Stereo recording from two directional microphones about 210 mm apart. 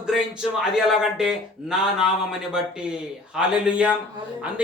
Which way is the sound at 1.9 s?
Centre (ahead or behind).